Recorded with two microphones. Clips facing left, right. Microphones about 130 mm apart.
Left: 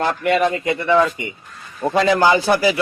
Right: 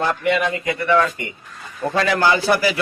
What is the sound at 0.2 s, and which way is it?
Speech, 45° left (ahead or behind).